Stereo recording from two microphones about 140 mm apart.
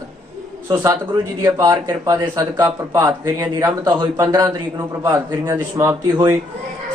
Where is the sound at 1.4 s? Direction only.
25° right (ahead or behind).